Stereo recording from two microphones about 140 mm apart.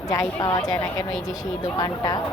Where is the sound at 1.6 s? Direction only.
30° left (ahead or behind).